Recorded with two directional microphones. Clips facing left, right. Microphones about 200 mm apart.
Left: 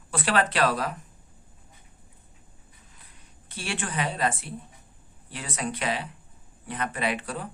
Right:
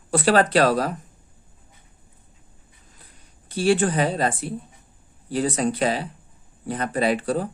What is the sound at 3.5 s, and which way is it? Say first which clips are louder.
Speech: right 14 dB; 35° right (ahead or behind).